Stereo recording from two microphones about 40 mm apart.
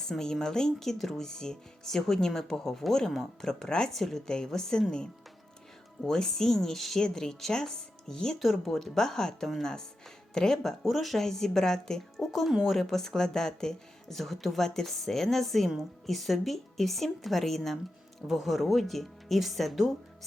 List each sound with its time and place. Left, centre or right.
0.0 s speech: centre
6.0 s speech: centre
14.2 s speech: centre